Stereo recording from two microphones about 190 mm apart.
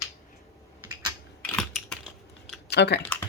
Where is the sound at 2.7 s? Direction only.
60° left (ahead or behind).